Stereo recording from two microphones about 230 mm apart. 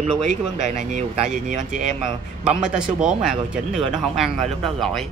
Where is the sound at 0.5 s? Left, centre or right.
Right.